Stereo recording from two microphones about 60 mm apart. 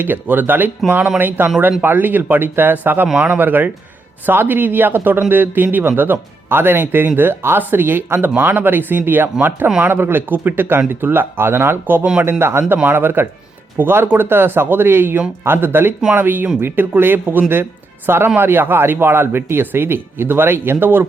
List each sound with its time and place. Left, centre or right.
0.0 s speech: right